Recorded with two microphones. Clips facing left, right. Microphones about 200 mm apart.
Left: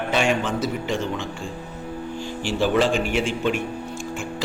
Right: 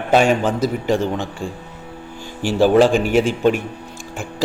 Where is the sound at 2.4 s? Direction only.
40° right (ahead or behind).